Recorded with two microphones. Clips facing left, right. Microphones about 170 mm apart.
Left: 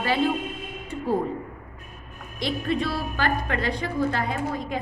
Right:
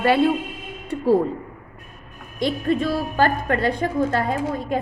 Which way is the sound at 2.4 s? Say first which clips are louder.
Right 5 dB; 45° right (ahead or behind).